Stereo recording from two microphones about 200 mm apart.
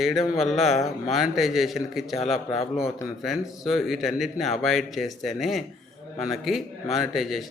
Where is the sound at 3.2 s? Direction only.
Centre (ahead or behind).